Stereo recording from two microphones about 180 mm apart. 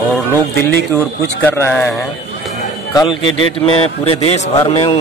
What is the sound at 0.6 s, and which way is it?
Speech, 60° left (ahead or behind).